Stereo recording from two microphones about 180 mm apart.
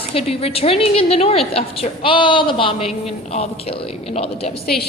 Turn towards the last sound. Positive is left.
turn(degrees=35)  # may be behind; listen again after turning